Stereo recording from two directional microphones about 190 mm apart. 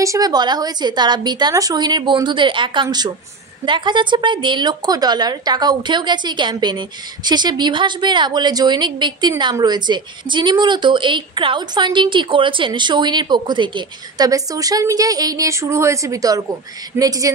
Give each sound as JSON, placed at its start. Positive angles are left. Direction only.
{"t": 0.0, "sound": "a woman's voice", "side_deg": -20}